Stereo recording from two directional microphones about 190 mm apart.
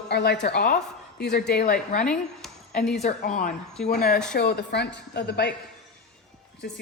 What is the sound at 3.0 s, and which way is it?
A woman's voice, 45° left (ahead or behind).